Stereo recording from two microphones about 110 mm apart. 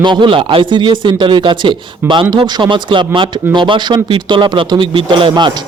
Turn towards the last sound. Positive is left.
turn(degrees=-40)  # may be behind; listen again after turning